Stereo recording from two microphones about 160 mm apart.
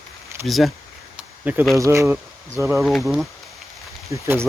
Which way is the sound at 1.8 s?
20° right (ahead or behind).